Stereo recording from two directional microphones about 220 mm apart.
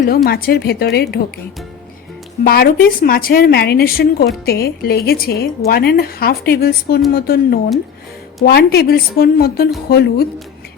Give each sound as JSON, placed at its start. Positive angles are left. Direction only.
{"t": 0.3, "sound": "a woman's voice", "side_deg": 45}
{"t": 2.4, "sound": "a woman's voice", "side_deg": 40}